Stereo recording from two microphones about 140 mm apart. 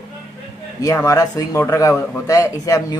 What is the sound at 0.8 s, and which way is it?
Speech, 25° left (ahead or behind).